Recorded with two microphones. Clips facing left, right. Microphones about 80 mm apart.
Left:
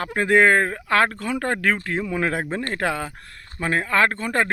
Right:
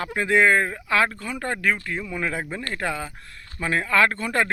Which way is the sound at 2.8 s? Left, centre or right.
Left.